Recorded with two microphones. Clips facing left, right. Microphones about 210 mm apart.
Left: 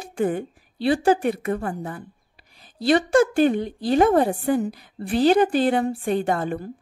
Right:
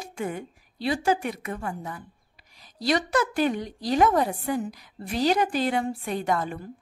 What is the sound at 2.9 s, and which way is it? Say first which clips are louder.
Speech: left 7 dB; 30° left (ahead or behind).